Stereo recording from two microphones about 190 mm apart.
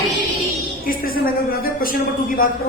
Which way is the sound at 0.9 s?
50° left (ahead or behind).